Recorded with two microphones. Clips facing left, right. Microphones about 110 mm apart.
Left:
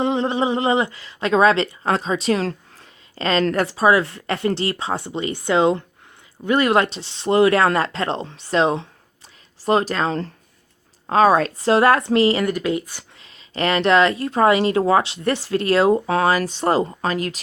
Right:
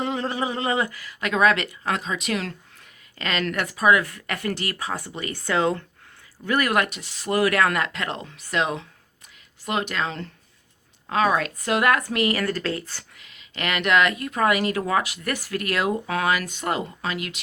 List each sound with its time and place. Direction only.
0.0 s speech: 20° left (ahead or behind)
13.1 s speech: 30° left (ahead or behind)